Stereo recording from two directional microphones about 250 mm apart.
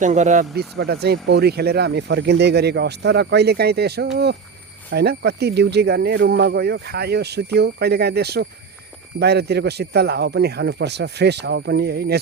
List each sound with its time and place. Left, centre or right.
0.0 s speech: right